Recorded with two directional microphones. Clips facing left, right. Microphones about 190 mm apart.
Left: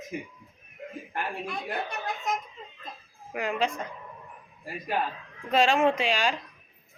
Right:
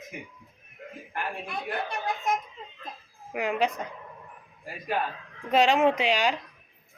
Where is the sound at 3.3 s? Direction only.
15° right (ahead or behind).